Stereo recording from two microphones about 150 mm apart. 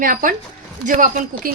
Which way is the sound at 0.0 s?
65° right (ahead or behind).